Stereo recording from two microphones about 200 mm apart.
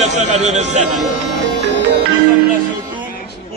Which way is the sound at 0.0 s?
35° right (ahead or behind).